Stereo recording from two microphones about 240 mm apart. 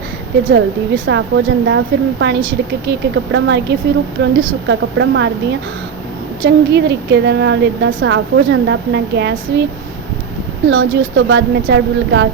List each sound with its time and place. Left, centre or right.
1.0 s a woman's voice: right
10.7 s a woman's voice: right